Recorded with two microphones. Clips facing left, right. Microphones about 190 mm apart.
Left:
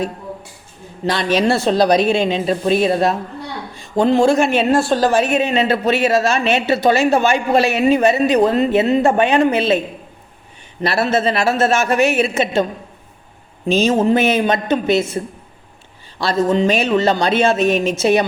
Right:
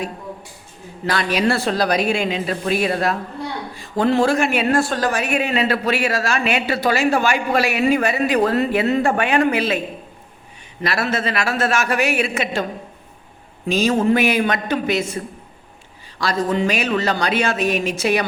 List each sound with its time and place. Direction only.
1.0 s speech: 25° left (ahead or behind)
10.8 s speech: 25° left (ahead or behind)
13.7 s speech: 25° left (ahead or behind)
16.2 s speech: 25° left (ahead or behind)